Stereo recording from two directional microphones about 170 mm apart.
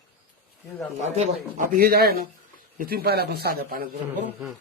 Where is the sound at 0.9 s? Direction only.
45° right (ahead or behind); by 3.8 s 60° right (ahead or behind).